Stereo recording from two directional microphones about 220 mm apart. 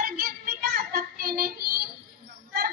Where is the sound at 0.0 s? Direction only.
40° right (ahead or behind).